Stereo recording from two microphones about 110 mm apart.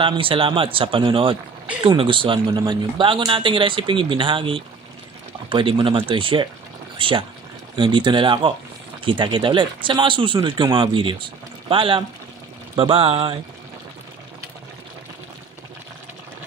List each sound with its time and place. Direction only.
0.0 s speech: 55° right (ahead or behind)